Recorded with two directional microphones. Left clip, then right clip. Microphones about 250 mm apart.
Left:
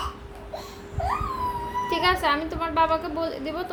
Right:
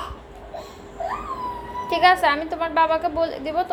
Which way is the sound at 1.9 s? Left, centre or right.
Left.